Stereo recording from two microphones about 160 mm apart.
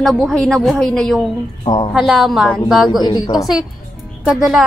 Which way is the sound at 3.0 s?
25° left (ahead or behind).